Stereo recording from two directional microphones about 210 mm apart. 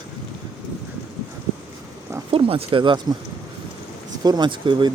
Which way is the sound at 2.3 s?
25° right (ahead or behind).